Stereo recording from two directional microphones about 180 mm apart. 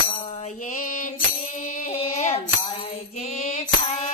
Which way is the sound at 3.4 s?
45° left (ahead or behind).